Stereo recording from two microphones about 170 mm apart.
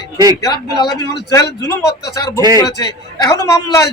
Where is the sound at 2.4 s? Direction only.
25° right (ahead or behind).